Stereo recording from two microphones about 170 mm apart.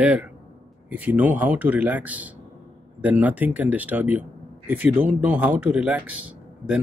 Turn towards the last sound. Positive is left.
turn(degrees=-10)  # may be behind; listen again after turning